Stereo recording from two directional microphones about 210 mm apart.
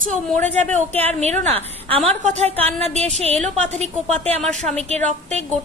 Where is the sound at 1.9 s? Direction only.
30° right (ahead or behind).